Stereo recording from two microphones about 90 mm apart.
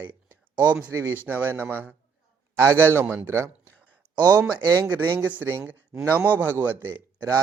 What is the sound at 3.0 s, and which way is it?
Speech, 15° right (ahead or behind).